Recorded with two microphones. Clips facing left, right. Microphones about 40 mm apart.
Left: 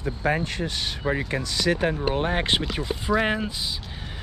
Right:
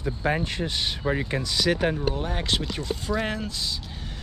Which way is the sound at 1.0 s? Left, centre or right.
Left.